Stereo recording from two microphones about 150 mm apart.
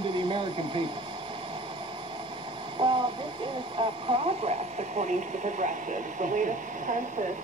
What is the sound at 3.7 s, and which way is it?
Speech, 40° right (ahead or behind).